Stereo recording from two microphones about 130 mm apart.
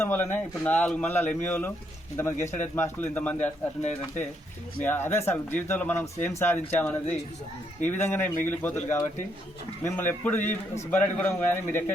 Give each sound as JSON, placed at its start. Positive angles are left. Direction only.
{"t": 0.0, "sound": "speech", "side_deg": 20}
{"t": 3.8, "sound": "speech", "side_deg": 65}
{"t": 4.8, "sound": "speech", "side_deg": 15}